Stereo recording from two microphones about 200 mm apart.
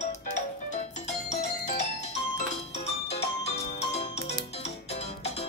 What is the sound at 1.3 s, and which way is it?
Music, 35° left (ahead or behind).